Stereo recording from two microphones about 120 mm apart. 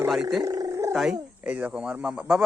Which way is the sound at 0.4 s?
30° right (ahead or behind).